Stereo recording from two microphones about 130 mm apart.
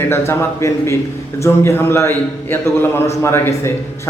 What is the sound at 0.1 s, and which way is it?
A man's voice, 20° left (ahead or behind).